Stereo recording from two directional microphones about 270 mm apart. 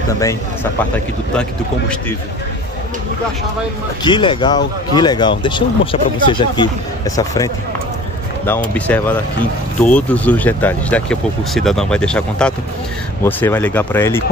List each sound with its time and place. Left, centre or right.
4.0 s speech: centre